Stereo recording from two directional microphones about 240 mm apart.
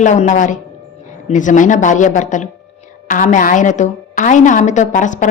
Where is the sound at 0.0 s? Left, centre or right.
Left.